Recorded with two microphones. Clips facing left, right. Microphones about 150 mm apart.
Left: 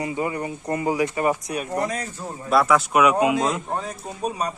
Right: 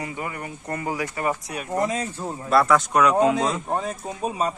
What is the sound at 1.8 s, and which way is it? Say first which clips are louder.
Speech: right 2 dB; 25° right (ahead or behind).